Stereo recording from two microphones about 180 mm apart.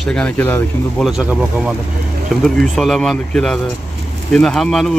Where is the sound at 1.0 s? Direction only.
5° right (ahead or behind).